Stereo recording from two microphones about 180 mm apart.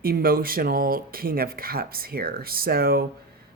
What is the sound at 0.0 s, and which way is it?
Speech, 55° right (ahead or behind).